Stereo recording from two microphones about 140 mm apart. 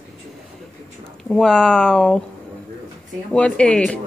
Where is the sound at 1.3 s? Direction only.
5° left (ahead or behind).